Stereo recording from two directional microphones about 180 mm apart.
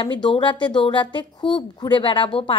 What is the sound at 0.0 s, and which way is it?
A woman's voice, 30° left (ahead or behind).